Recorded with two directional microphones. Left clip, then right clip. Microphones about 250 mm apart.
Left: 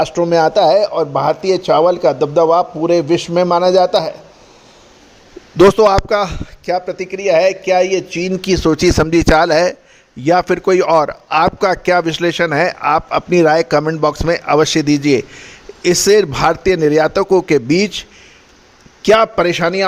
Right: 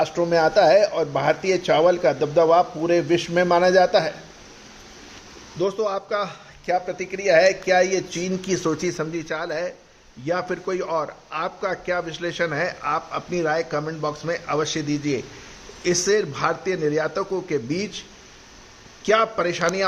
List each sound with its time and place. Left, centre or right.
0.0 s speech: left
5.6 s a man's voice: left
19.0 s a man's voice: left